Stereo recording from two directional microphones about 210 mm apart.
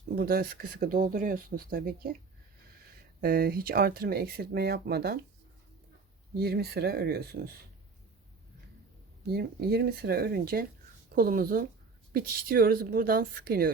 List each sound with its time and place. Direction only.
0.2 s speech: 45° right (ahead or behind)
3.2 s speech: 45° right (ahead or behind)
6.3 s speech: 50° right (ahead or behind)
9.3 s speech: 50° right (ahead or behind)